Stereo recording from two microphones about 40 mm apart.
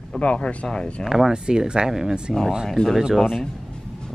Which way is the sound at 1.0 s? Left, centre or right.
Centre.